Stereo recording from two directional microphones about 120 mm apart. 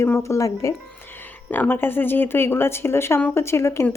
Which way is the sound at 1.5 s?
15° left (ahead or behind).